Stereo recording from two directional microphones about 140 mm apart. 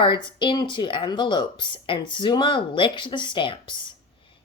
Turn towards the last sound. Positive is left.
turn(degrees=35)  # may be behind; listen again after turning